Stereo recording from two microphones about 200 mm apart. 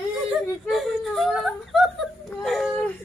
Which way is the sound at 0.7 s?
Centre (ahead or behind).